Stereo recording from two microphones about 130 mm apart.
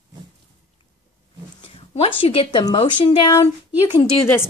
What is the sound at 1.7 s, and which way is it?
Speech, 45° left (ahead or behind).